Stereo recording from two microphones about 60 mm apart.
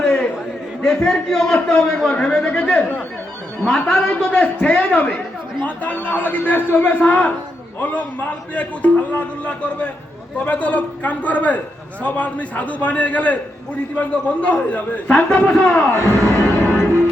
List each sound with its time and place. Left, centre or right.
0.0 s chatter: centre
0.8 s a man's voice: centre
3.8 s a man's voice: centre
16.3 s music: left